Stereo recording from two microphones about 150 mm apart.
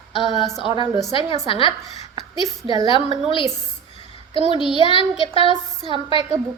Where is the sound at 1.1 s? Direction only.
35° left (ahead or behind).